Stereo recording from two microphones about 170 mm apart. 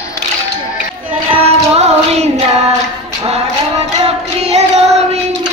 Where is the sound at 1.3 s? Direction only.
40° right (ahead or behind).